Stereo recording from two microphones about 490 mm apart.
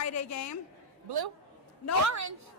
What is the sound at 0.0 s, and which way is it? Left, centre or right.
Speech, left.